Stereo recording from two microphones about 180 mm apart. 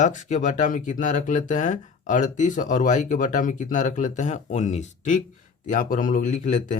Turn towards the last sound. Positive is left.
turn(degrees=45)  # may be behind; listen again after turning